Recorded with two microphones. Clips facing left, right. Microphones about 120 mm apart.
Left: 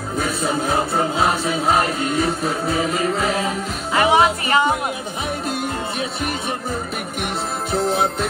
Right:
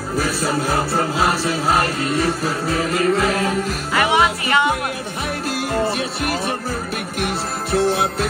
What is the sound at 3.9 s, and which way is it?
Speech, 30° left (ahead or behind).